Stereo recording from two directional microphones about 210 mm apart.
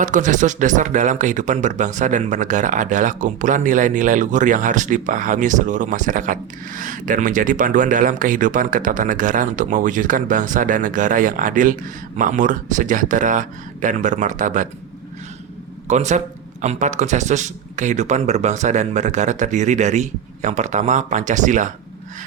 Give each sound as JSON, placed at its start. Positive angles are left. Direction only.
{"t": 0.0, "sound": "speech", "side_deg": -35}
{"t": 15.9, "sound": "speech", "side_deg": -35}